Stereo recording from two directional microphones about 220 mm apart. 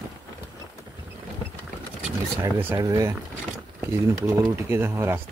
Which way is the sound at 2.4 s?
10° right (ahead or behind).